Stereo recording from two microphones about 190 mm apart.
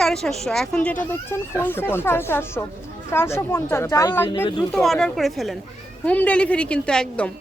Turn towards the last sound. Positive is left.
turn(degrees=5)  # may be behind; listen again after turning